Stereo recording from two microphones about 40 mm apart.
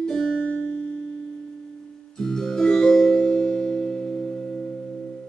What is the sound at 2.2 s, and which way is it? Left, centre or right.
Music, centre.